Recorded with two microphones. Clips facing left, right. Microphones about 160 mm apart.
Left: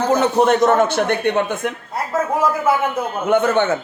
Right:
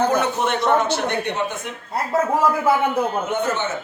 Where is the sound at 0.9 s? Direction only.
55° left (ahead or behind).